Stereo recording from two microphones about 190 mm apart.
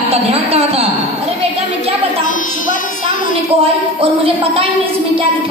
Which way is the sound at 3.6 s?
30° right (ahead or behind).